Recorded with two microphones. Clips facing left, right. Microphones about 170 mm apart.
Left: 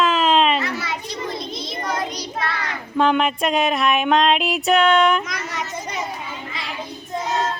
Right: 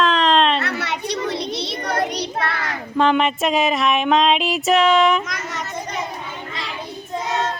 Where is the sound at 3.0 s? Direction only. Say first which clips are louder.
Right 1 dB; centre (ahead or behind).